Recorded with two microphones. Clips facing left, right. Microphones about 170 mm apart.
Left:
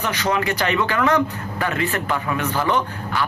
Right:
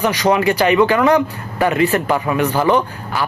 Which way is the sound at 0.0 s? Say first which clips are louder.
Right 7 dB; 10° right (ahead or behind).